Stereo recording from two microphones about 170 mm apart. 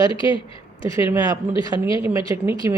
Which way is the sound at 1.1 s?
20° right (ahead or behind).